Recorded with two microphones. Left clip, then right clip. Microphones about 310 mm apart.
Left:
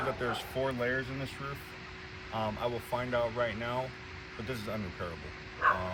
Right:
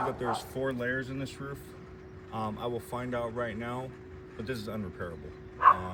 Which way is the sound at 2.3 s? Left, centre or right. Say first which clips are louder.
Left 1 dB; left.